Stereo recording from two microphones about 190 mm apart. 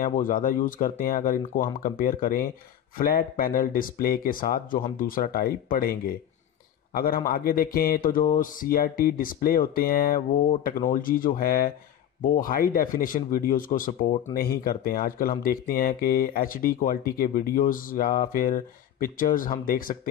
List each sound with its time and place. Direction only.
0.0 s a man's voice: 45° left (ahead or behind)